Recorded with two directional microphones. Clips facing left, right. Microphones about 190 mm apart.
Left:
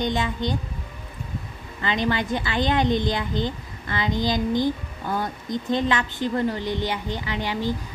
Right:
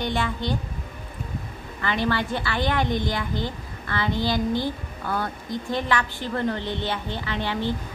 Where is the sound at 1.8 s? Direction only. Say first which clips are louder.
Left 1 dB; 20° left (ahead or behind).